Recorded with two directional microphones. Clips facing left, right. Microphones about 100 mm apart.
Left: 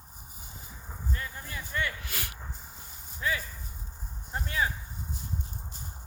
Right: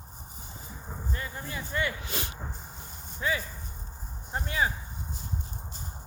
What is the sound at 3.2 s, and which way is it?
Speech, 25° right (ahead or behind).